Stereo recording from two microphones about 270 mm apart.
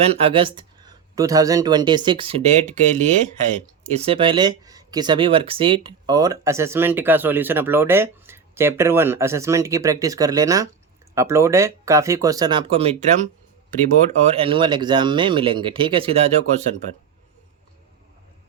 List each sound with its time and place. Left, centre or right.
0.0 s speech: right